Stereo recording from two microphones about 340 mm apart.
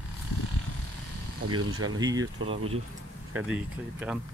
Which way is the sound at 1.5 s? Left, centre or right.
Right.